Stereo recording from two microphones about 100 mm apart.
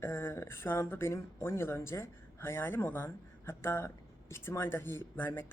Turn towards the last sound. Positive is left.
turn(degrees=20)  # may be behind; listen again after turning